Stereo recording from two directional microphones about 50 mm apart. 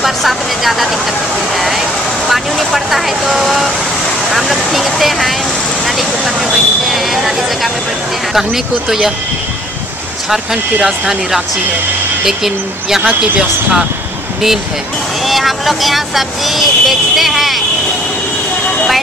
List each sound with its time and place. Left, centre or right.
0.0 s speech: centre
2.7 s speech: centre
10.3 s speech: centre
13.4 s speech: centre
15.2 s speech: centre